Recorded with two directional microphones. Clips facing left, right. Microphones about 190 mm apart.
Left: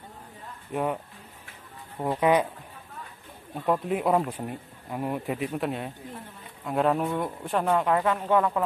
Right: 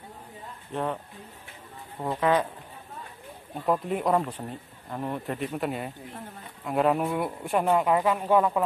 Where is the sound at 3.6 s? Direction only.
Centre (ahead or behind).